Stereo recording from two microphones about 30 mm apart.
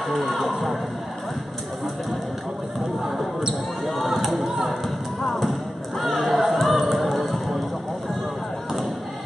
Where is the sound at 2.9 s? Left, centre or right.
Centre.